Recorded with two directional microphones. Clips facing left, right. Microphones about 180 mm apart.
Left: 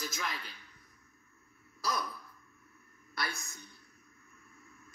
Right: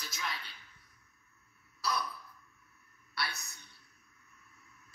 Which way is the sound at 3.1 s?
45° left (ahead or behind).